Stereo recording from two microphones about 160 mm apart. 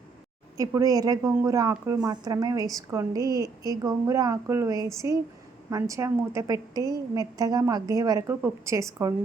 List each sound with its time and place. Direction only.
0.5 s a woman's voice: 20° right (ahead or behind)